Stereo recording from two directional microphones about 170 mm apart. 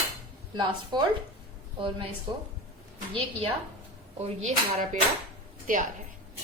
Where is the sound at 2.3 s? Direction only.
30° right (ahead or behind).